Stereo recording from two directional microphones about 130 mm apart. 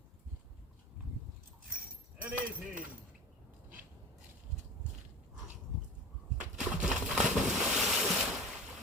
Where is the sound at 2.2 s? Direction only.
10° right (ahead or behind).